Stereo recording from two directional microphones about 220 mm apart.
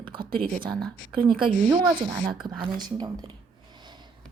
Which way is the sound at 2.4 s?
20° right (ahead or behind).